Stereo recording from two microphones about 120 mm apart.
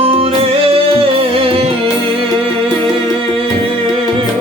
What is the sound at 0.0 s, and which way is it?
Music, 50° right (ahead or behind).